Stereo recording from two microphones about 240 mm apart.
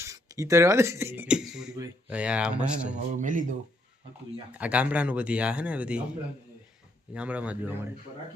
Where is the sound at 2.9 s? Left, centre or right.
Right.